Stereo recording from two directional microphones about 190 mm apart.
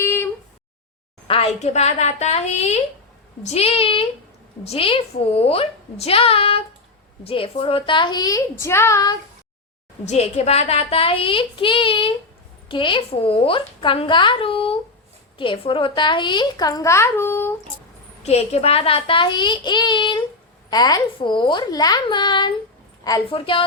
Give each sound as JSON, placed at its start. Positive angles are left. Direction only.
{"t": 0.0, "sound": "a sound", "side_deg": 10}
{"t": 1.3, "sound": "a woman's voice", "side_deg": 35}
{"t": 10.1, "sound": "a woman's voice", "side_deg": 35}
{"t": 18.2, "sound": "a woman's voice", "side_deg": 35}